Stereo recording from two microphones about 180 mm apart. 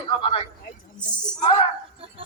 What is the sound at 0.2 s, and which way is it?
Speech, 30° left (ahead or behind).